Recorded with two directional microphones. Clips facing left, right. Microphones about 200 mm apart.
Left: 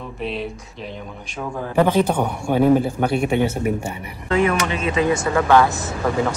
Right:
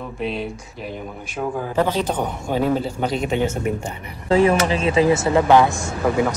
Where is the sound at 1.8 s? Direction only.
10° left (ahead or behind).